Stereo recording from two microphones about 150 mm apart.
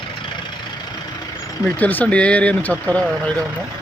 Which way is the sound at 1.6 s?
10° left (ahead or behind).